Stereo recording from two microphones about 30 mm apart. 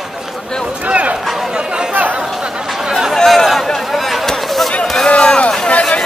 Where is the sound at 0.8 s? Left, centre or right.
Right.